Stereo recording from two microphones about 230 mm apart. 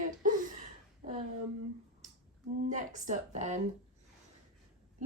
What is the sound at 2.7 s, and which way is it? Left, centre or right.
Speech, right.